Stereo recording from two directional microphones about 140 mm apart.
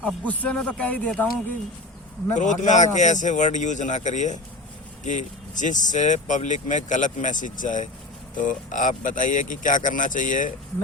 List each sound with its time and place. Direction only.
0.0 s speech: 10° left (ahead or behind)
2.3 s speech: 60° left (ahead or behind)